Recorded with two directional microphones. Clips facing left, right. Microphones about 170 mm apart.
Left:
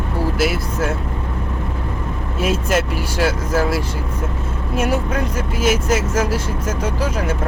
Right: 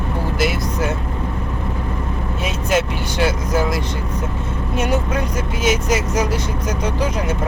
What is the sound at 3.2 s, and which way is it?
Speech, 5° left (ahead or behind).